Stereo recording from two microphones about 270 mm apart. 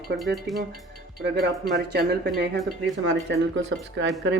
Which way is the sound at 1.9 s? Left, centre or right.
Right.